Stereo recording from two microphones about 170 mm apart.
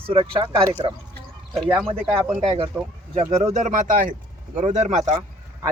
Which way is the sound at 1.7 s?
10° right (ahead or behind).